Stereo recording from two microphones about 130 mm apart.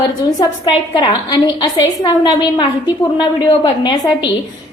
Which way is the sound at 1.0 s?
35° left (ahead or behind).